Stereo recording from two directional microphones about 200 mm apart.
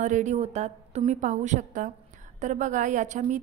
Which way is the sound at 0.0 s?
35° right (ahead or behind).